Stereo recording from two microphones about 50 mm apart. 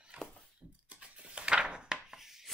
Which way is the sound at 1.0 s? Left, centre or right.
Right.